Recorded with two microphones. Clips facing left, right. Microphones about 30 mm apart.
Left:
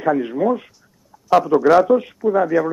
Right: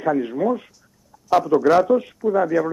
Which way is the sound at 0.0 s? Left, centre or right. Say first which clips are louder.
Left 2 dB; centre.